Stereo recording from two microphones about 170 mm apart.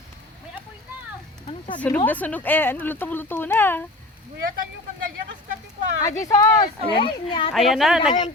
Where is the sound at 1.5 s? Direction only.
30° left (ahead or behind).